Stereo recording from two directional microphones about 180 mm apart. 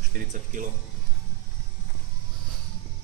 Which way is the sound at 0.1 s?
45° right (ahead or behind).